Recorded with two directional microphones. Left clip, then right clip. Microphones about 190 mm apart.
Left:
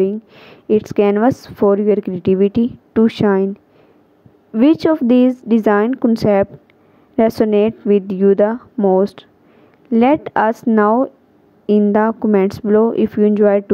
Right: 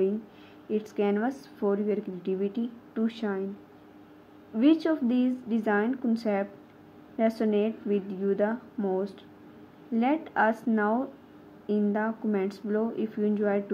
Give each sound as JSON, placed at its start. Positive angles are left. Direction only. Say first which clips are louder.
{"t": 0.0, "sound": "a woman's voice", "louder": "left 10 dB", "side_deg": 55}
{"t": 4.6, "sound": "a woman's voice", "louder": "left 11 dB", "side_deg": 60}